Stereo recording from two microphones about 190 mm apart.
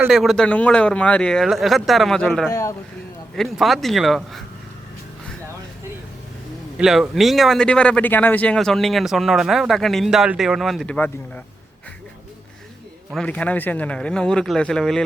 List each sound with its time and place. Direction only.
0.0 s speech: centre (ahead or behind)
2.5 s speech: 15° left (ahead or behind)
3.3 s speech: centre (ahead or behind)
6.7 s speech: 5° right (ahead or behind)
13.1 s speech: 5° left (ahead or behind)